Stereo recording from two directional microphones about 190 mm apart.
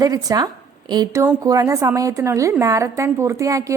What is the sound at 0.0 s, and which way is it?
A woman's voice, 20° right (ahead or behind).